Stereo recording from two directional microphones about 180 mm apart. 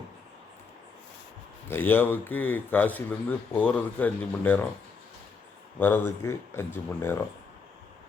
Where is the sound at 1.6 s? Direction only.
10° left (ahead or behind).